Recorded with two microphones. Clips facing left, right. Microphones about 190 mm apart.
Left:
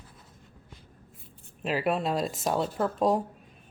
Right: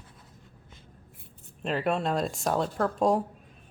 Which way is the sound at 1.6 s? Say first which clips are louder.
Even; 5° left (ahead or behind).